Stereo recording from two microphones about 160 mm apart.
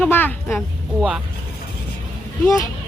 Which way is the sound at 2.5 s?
20° left (ahead or behind).